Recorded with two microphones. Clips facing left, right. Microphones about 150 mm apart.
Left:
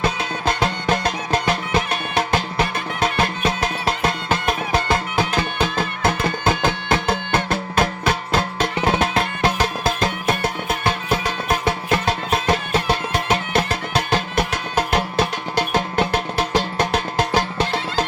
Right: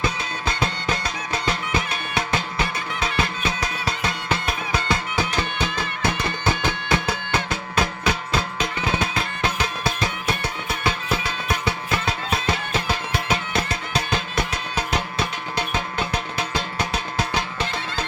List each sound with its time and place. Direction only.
0.0 s music: 50° left (ahead or behind)